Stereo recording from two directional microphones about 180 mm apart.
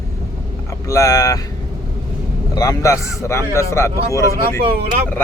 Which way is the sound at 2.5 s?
20° left (ahead or behind).